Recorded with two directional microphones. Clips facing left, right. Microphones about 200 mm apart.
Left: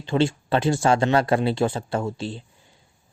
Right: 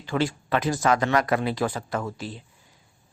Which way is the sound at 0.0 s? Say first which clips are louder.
Left 4 dB; 25° left (ahead or behind).